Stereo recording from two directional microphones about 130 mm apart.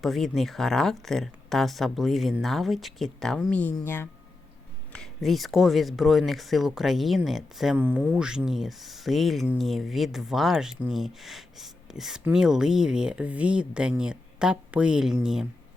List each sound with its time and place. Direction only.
0.0 s speech: centre (ahead or behind)
3.6 s speech: 15° left (ahead or behind)
4.9 s speech: 5° left (ahead or behind)
7.8 s speech: 15° right (ahead or behind)